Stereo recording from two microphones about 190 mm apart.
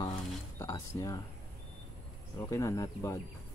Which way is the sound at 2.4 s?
15° left (ahead or behind).